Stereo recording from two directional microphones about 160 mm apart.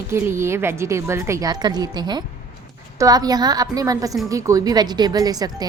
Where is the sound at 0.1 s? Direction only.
15° right (ahead or behind).